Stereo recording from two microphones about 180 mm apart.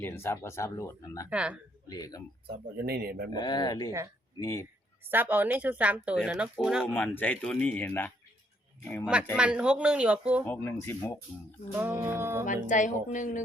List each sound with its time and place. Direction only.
0.0 s speech: 15° left (ahead or behind)
1.3 s speech: 5° right (ahead or behind)
1.9 s speech: 20° left (ahead or behind)
2.8 s speech: 60° right (ahead or behind)
3.3 s speech: 20° left (ahead or behind)
5.0 s speech: 10° right (ahead or behind)
6.8 s speech: 5° left (ahead or behind)
9.3 s speech: 5° right (ahead or behind)
10.4 s speech: 15° left (ahead or behind)
11.8 s speech: 10° right (ahead or behind)
12.6 s speech: 45° left (ahead or behind)